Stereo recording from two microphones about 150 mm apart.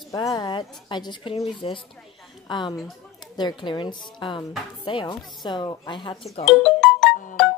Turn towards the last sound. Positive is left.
turn(degrees=0)  # may be behind; listen again after turning